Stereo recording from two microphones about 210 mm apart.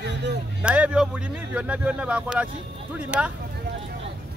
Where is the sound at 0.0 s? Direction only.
55° right (ahead or behind).